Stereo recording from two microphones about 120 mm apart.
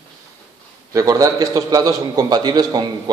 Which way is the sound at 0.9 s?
30° right (ahead or behind).